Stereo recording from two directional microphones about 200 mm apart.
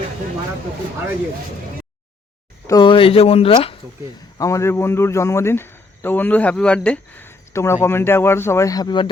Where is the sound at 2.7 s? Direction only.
25° left (ahead or behind).